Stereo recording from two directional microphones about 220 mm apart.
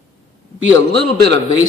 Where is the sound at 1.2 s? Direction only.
55° right (ahead or behind).